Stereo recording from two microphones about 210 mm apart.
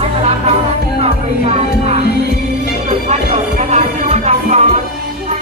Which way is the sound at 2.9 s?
30° right (ahead or behind).